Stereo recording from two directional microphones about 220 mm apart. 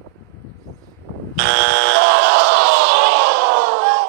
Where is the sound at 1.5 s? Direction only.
45° right (ahead or behind).